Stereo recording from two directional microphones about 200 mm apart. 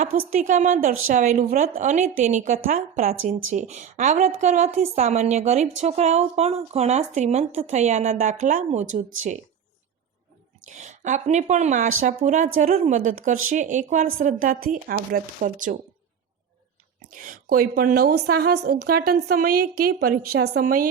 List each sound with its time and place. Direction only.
0.0 s a woman's voice: 40° right (ahead or behind)
10.7 s a woman's voice: 40° right (ahead or behind)
17.2 s a woman's voice: 45° right (ahead or behind)